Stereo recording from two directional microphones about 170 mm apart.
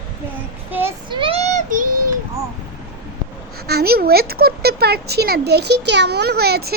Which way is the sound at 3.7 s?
65° right (ahead or behind).